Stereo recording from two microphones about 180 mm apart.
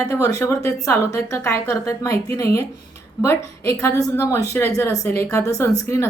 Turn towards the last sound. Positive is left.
turn(degrees=15)  # may be behind; listen again after turning